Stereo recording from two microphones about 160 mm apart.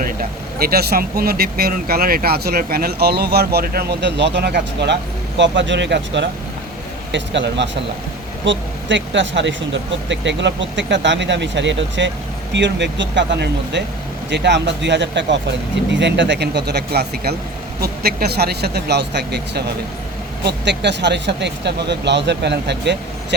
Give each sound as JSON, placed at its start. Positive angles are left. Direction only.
{"t": 0.0, "sound": "speech", "side_deg": -65}
{"t": 10.2, "sound": "speech", "side_deg": -90}